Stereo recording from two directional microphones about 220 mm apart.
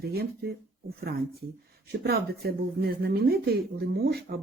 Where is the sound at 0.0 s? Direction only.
45° right (ahead or behind).